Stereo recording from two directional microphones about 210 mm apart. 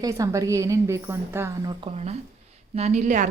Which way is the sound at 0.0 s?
15° right (ahead or behind).